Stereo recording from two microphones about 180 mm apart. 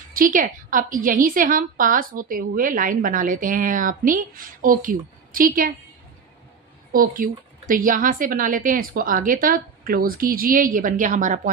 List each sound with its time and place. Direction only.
0.1 s a woman's voice: 50° right (ahead or behind)
6.9 s a woman's voice: 50° right (ahead or behind)